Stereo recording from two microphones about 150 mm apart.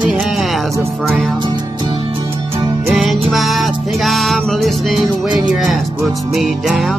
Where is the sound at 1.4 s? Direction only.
30° right (ahead or behind).